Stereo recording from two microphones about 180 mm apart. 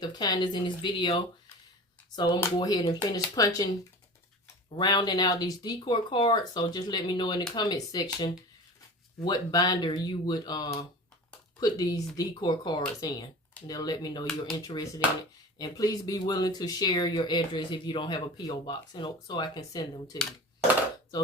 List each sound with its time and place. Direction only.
0.0 s speech: 20° left (ahead or behind)
4.7 s speech: 25° left (ahead or behind)